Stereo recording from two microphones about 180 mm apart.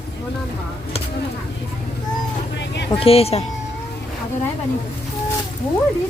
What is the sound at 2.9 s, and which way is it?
Speech, 30° left (ahead or behind).